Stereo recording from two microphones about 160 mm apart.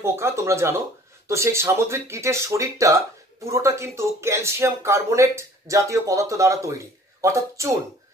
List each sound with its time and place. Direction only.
0.0 s speech: 15° right (ahead or behind)